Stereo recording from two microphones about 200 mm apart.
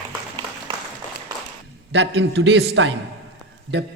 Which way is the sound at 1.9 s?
60° right (ahead or behind).